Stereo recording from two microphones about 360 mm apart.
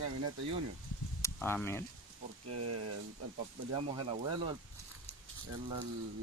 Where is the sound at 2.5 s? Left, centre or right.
Right.